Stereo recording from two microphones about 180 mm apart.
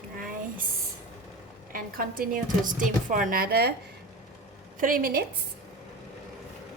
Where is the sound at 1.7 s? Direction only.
55° right (ahead or behind).